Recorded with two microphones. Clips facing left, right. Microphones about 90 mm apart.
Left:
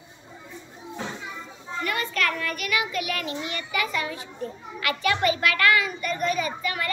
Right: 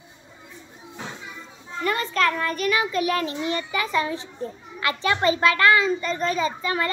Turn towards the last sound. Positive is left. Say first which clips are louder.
# right 4 dB
turn(degrees=-30)  # may be behind; listen again after turning